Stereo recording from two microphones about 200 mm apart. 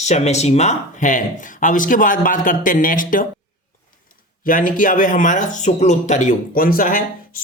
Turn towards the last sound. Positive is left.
turn(degrees=45)  # may be behind; listen again after turning